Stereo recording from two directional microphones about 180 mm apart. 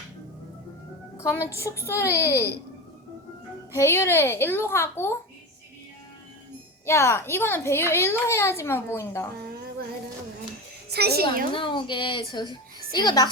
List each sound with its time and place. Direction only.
1.1 s a woman's voice: 15° left (ahead or behind)
3.8 s a woman's voice: 15° left (ahead or behind)
6.8 s a woman's voice: 15° left (ahead or behind)
10.9 s a woman's voice: 60° right (ahead or behind)
11.5 s speech: 30° left (ahead or behind)